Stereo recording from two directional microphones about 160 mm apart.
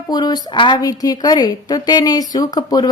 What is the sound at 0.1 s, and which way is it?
A woman's voice, 25° left (ahead or behind).